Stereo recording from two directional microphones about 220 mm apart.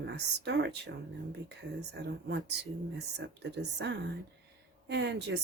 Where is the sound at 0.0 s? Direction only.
50° right (ahead or behind).